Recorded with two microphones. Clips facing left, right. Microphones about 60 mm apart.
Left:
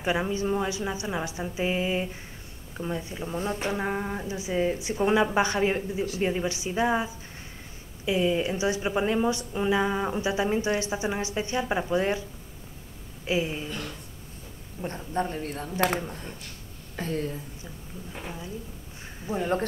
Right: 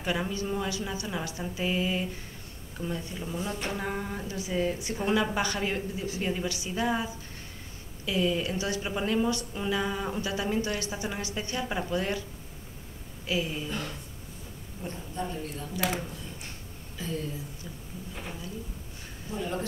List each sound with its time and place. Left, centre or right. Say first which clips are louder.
0.0 s a woman's voice: left 4 dB; left
13.3 s a woman's voice: left 3 dB; left
13.7 s speech: right 1 dB; centre
14.9 s speech: left 6 dB; left
18.1 s a woman's voice: left 3 dB; left
19.3 s speech: left 6 dB; left